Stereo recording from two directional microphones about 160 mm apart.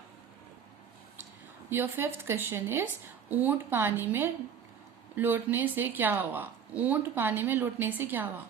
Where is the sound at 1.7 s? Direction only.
15° right (ahead or behind).